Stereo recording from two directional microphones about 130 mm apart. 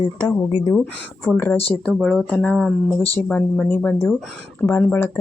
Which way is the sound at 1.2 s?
15° left (ahead or behind).